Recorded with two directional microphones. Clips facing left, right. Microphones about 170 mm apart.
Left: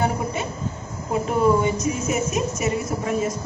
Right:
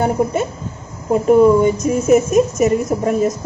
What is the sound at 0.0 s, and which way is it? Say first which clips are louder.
Speech: right 7 dB; 50° right (ahead or behind).